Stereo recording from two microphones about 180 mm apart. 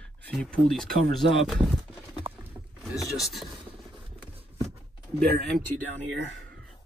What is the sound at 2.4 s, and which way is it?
Rowboat, 10° right (ahead or behind).